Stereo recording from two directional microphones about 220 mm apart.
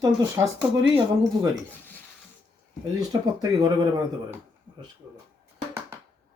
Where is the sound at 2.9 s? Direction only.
20° right (ahead or behind).